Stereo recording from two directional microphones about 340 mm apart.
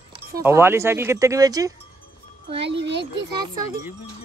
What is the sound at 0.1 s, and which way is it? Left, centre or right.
Speech, centre.